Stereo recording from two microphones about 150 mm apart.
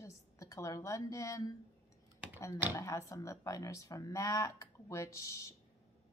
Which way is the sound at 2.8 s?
20° left (ahead or behind).